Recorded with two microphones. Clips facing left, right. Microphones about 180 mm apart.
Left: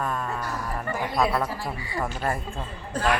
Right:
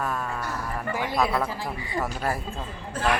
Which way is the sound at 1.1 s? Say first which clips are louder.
Left 1 dB; centre (ahead or behind).